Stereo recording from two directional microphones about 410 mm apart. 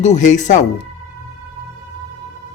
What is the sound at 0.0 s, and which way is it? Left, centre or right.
Speech, centre.